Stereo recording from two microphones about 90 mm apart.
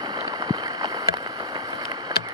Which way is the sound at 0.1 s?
40° right (ahead or behind).